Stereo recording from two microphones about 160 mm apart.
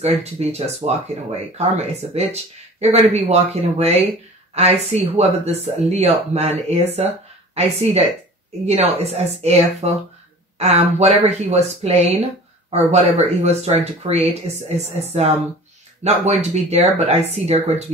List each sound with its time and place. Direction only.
0.0 s speech: 40° right (ahead or behind)